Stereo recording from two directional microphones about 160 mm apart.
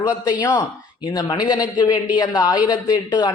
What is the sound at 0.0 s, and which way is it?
A man's voice, 25° left (ahead or behind).